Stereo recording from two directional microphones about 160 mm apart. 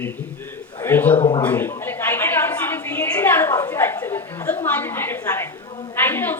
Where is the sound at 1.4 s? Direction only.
10° left (ahead or behind).